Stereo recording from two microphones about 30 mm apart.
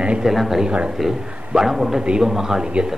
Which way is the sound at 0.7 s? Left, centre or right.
Right.